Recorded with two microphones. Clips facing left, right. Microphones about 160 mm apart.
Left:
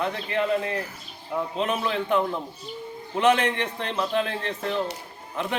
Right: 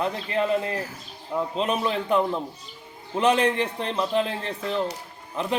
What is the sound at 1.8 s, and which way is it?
Speech, 35° right (ahead or behind).